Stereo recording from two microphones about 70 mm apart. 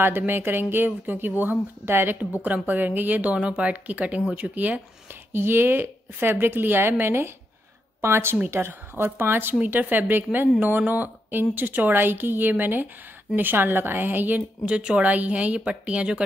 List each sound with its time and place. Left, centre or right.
0.3 s a woman's voice: right
5.3 s a woman's voice: right
14.7 s a woman's voice: centre